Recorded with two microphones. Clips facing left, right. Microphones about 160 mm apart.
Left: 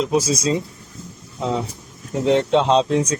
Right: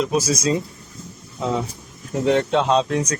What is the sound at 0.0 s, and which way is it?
Speech, 25° left (ahead or behind).